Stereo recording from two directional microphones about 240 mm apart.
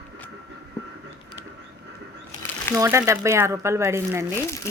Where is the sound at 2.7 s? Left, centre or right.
Centre.